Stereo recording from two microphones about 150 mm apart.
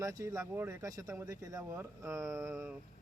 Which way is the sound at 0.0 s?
20° right (ahead or behind).